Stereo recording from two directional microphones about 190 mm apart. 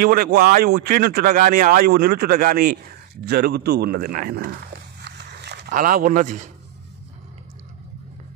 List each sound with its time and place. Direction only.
0.0 s a man's voice: 50° right (ahead or behind)
5.0 s a sound: 60° right (ahead or behind)
5.7 s speech: 45° right (ahead or behind)